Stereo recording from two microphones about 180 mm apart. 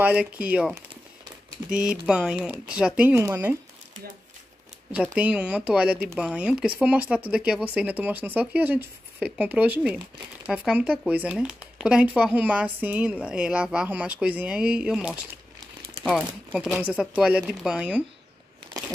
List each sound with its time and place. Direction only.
0.0 s speech: 5° right (ahead or behind)
4.9 s speech: 5° right (ahead or behind)
18.8 s a sound: 20° right (ahead or behind)